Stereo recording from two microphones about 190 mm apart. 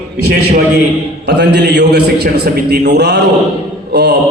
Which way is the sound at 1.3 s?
60° right (ahead or behind).